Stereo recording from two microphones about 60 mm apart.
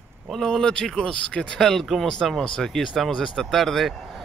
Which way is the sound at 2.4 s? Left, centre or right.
Centre.